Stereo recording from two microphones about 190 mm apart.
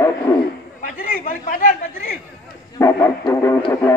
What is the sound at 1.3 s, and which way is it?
Speech, 45° left (ahead or behind).